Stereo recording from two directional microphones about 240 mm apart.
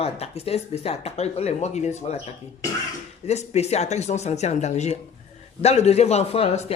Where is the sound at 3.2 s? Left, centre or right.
Left.